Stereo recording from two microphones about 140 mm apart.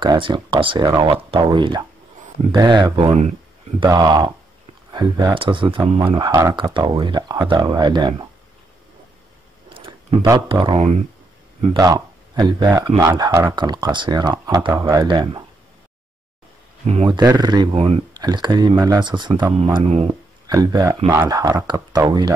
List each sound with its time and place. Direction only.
0.0 s speech: 35° right (ahead or behind)
6.5 s speech: 35° right (ahead or behind)
9.8 s a sound: 40° right (ahead or behind)
10.5 s speech: 35° right (ahead or behind)
16.8 s speech: 45° right (ahead or behind)
19.5 s speech: 45° right (ahead or behind)
20.5 s speech: 25° right (ahead or behind)